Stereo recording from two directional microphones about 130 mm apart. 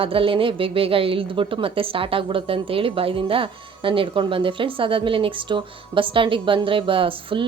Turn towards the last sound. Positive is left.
turn(degrees=-40)  # may be behind; listen again after turning